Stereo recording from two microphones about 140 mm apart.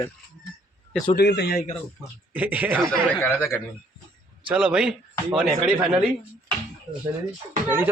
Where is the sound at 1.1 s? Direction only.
90° left.